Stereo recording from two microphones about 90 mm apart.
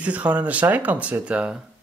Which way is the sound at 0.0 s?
15° right (ahead or behind).